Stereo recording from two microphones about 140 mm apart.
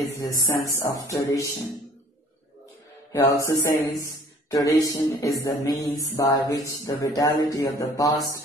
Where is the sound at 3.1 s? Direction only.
25° left (ahead or behind).